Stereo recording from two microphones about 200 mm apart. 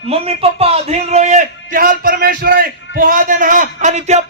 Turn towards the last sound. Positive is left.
turn(degrees=-35)  # may be behind; listen again after turning